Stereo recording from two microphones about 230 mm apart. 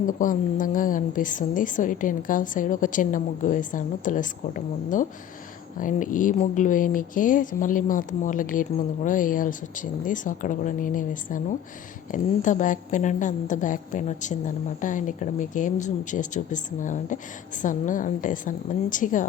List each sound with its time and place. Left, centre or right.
0.2 s a woman's voice: left